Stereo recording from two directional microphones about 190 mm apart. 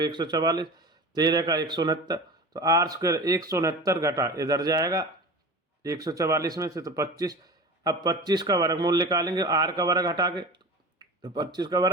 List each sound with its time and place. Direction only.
0.0 s speech: 20° right (ahead or behind)